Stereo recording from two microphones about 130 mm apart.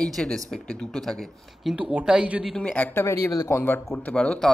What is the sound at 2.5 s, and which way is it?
A man's voice, 10° left (ahead or behind).